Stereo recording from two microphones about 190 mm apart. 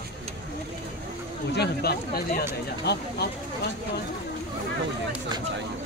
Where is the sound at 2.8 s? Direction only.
60° left (ahead or behind).